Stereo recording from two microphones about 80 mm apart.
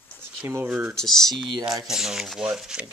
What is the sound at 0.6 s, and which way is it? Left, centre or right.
Speech, centre.